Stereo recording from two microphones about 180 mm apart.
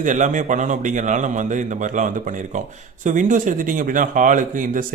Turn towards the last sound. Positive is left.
turn(degrees=-45)  # may be behind; listen again after turning